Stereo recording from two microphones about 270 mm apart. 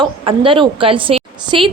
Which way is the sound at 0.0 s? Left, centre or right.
Centre.